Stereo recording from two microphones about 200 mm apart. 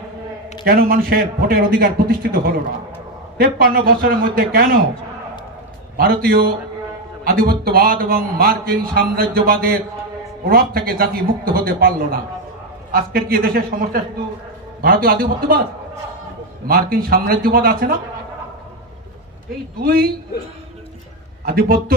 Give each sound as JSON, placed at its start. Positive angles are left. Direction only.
{"t": 0.7, "sound": "a man's voice", "side_deg": -50}
{"t": 5.9, "sound": "a man's voice", "side_deg": -50}
{"t": 16.6, "sound": "a man's voice", "side_deg": -50}
{"t": 19.8, "sound": "a man's voice", "side_deg": -50}
{"t": 21.5, "sound": "a man's voice", "side_deg": -50}